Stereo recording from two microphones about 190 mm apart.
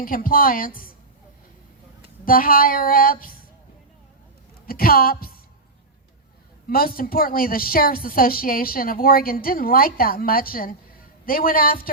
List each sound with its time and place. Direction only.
0.0 s a woman's voice: 50° left (ahead or behind)
2.2 s a woman's voice: 50° left (ahead or behind)
4.6 s a woman's voice: 50° left (ahead or behind)
6.7 s a woman's voice: 50° left (ahead or behind)